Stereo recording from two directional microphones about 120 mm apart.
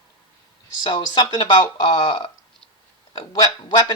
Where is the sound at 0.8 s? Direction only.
35° left (ahead or behind).